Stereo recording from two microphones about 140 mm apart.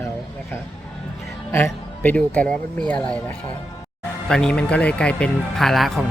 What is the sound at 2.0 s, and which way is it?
Speech, 10° left (ahead or behind).